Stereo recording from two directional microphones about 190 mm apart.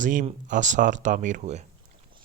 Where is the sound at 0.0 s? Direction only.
45° right (ahead or behind).